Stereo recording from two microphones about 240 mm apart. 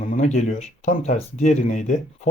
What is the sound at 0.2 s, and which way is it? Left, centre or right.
Speech, left.